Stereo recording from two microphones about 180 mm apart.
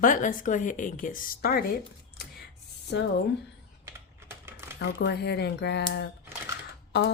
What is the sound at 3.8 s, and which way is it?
Typing, 15° right (ahead or behind).